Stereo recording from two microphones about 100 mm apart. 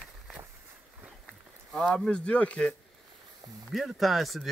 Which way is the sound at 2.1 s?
10° left (ahead or behind).